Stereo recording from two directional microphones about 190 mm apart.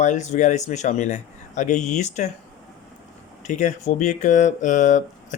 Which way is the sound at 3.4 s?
40° left (ahead or behind).